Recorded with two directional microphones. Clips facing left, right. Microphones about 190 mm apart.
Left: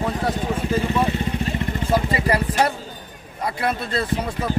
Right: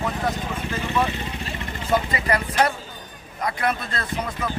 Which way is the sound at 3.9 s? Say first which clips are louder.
Left 5 dB; 30° left (ahead or behind).